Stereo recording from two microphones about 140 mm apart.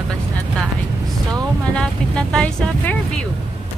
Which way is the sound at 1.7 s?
5° left (ahead or behind).